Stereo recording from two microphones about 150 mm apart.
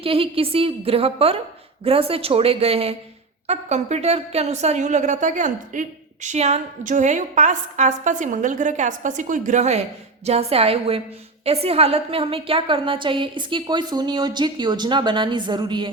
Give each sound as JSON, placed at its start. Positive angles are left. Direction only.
{"t": 0.0, "sound": "a woman's voice", "side_deg": -40}